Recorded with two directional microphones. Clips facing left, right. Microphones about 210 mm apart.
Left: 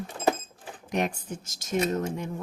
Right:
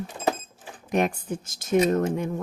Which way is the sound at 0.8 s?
55° right (ahead or behind).